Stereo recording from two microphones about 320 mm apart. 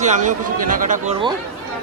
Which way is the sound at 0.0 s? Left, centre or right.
Right.